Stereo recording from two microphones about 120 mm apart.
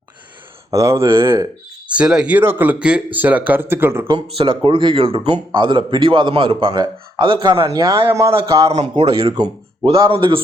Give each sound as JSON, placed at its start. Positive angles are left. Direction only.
{"t": 0.7, "sound": "speech", "side_deg": -25}
{"t": 1.9, "sound": "speech", "side_deg": -5}
{"t": 4.4, "sound": "a man's voice", "side_deg": -45}
{"t": 7.7, "sound": "speech", "side_deg": -30}
{"t": 8.7, "sound": "speech", "side_deg": -65}
{"t": 9.3, "sound": "speech", "side_deg": -35}
{"t": 9.9, "sound": "a man's voice", "side_deg": -45}